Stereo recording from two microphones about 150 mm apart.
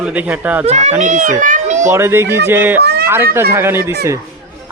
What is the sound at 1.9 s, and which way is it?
A man's voice, 15° right (ahead or behind).